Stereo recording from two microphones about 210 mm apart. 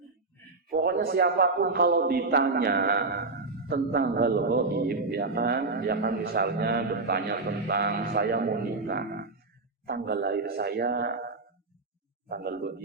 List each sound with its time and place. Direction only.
0.7 s a man's voice: 45° right (ahead or behind)
12.3 s a man's voice: 45° right (ahead or behind)